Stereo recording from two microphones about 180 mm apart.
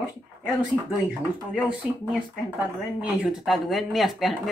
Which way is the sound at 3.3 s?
Centre (ahead or behind).